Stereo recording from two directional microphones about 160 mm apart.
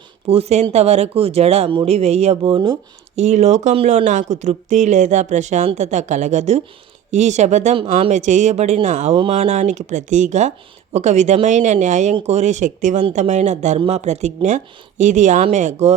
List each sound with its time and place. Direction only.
0.3 s speech: 40° right (ahead or behind)
2.4 s speech: 30° right (ahead or behind)
3.2 s speech: 45° right (ahead or behind)